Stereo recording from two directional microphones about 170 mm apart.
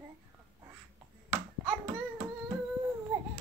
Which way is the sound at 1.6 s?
15° right (ahead or behind).